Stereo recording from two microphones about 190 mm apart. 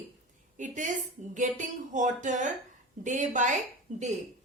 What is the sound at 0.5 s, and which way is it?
A woman's voice, 40° right (ahead or behind).